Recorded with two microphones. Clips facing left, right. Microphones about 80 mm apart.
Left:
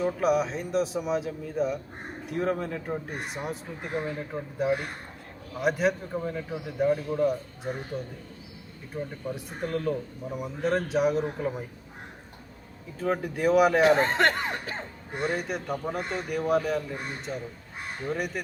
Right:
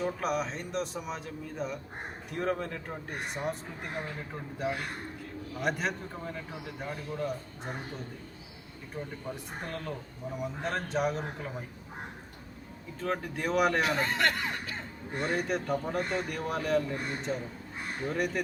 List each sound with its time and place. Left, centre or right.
0.0 s speech: centre
8.9 s speech: centre
13.0 s speech: centre
13.8 s speech: left
15.1 s speech: centre